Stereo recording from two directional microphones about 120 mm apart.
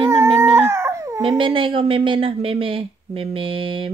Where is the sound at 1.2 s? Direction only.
45° right (ahead or behind).